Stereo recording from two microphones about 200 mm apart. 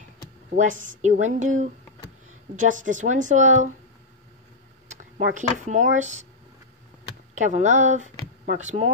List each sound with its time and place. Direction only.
0.6 s speech: 40° right (ahead or behind)
5.1 s speech: 40° right (ahead or behind)
7.3 s speech: 35° right (ahead or behind)